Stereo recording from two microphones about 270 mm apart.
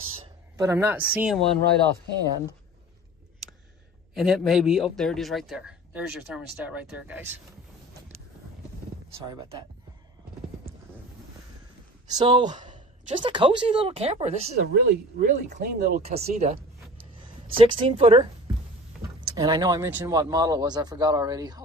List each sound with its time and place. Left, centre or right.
0.6 s a man's voice: centre
4.1 s a man's voice: centre
9.3 s speech: centre
12.1 s speech: centre
14.5 s speech: right
17.6 s speech: centre
19.2 s speech: centre